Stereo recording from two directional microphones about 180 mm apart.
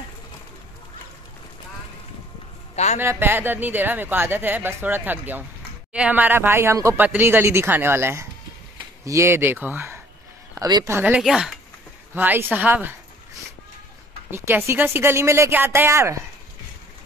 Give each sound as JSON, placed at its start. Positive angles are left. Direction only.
{"t": 2.7, "sound": "a sound", "side_deg": 40}
{"t": 3.0, "sound": "a woman's voice", "side_deg": -15}
{"t": 14.3, "sound": "a woman's voice", "side_deg": -15}